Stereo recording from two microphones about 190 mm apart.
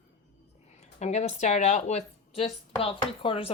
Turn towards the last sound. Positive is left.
turn(degrees=30)  # may be behind; listen again after turning